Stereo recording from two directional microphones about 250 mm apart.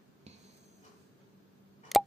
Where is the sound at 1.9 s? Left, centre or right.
Centre.